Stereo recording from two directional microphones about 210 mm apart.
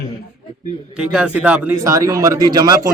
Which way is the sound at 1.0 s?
5° right (ahead or behind).